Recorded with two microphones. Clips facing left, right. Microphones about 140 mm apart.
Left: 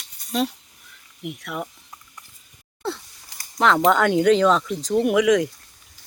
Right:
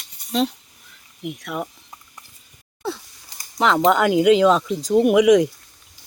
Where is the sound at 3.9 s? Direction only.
5° right (ahead or behind).